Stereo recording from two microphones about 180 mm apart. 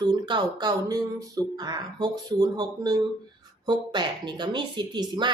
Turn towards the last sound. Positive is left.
turn(degrees=-25)  # may be behind; listen again after turning